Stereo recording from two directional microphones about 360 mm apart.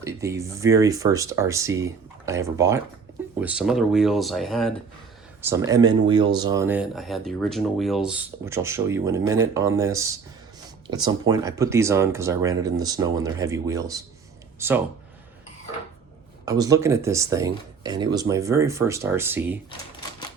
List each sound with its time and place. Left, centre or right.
0.2 s speech: centre
16.5 s speech: centre